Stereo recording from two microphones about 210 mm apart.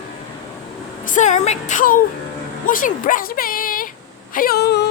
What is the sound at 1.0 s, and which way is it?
A woman's voice, 35° left (ahead or behind).